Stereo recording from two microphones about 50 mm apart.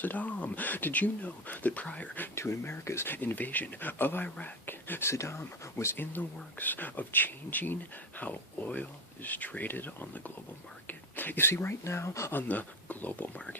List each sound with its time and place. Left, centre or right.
0.0 s speech: left
2.3 s speech: left
3.1 s speech: left
5.1 s speech: left
5.4 s speech: left
11.8 s speech: left
12.3 s speech: left